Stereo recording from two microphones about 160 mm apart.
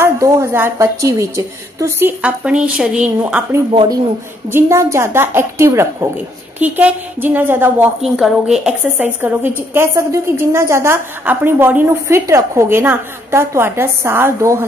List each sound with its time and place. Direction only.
0.0 s a woman's voice: 15° right (ahead or behind)
3.7 s speech: 30° right (ahead or behind)
4.5 s a woman's voice: 15° right (ahead or behind)